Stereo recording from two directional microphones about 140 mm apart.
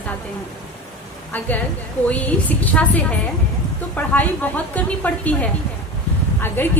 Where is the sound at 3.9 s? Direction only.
10° left (ahead or behind).